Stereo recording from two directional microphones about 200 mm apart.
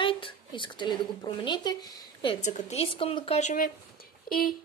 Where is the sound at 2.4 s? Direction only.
35° left (ahead or behind).